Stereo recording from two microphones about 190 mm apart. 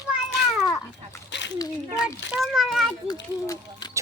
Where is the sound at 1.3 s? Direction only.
70° left (ahead or behind).